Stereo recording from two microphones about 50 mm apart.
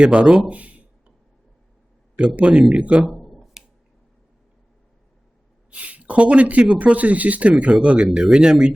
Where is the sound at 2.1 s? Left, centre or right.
Right.